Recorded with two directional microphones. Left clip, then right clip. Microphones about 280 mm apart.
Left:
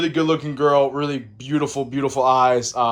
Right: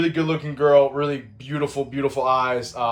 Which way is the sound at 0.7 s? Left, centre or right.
Centre.